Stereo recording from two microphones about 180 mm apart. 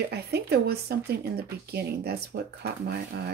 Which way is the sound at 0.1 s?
65° right (ahead or behind).